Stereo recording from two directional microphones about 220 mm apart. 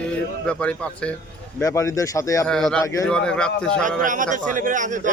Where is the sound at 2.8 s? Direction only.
15° left (ahead or behind).